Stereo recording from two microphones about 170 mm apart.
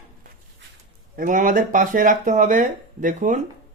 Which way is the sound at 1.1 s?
50° right (ahead or behind).